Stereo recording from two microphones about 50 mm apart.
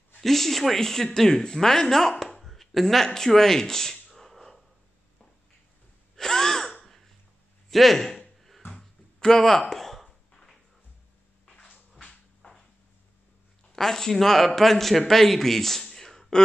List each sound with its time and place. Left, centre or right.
0.2 s speech: centre
6.1 s gasp: centre
7.7 s speech: centre
8.4 s bouncing: centre
8.7 s a sound: centre
13.7 s speech: centre